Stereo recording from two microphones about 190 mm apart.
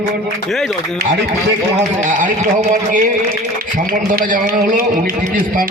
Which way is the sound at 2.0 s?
40° right (ahead or behind).